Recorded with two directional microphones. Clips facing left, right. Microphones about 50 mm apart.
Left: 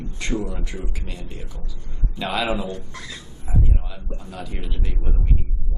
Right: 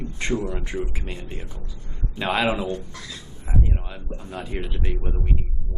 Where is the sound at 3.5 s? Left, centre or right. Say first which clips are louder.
Even; right.